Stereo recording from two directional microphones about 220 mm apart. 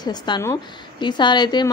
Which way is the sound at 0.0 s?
20° left (ahead or behind).